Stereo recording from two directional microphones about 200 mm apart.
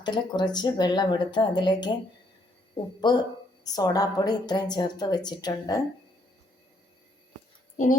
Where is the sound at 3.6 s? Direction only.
20° left (ahead or behind).